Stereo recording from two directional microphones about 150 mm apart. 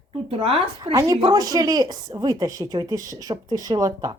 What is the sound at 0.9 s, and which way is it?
A woman's voice, 20° right (ahead or behind).